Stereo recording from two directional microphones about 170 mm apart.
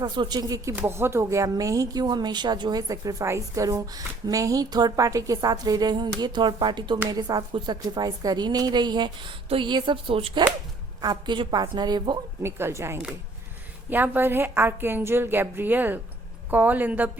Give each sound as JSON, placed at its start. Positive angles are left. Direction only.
{"t": 0.0, "sound": "speech", "side_deg": -25}
{"t": 12.4, "sound": "a woman's voice", "side_deg": -15}